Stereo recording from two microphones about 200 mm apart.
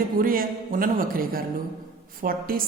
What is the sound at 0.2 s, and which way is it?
A woman's voice, 45° right (ahead or behind).